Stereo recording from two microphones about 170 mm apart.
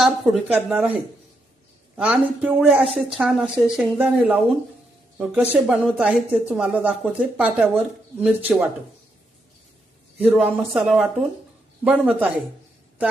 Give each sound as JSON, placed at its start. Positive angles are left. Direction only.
{"t": 0.0, "sound": "a woman's voice", "side_deg": -10}
{"t": 2.0, "sound": "a woman's voice", "side_deg": -5}
{"t": 10.2, "sound": "a woman's voice", "side_deg": -5}